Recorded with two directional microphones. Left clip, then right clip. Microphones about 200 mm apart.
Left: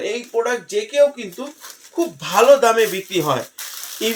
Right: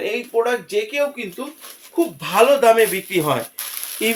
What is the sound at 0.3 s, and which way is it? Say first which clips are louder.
Speech: right 1 dB; 5° right (ahead or behind).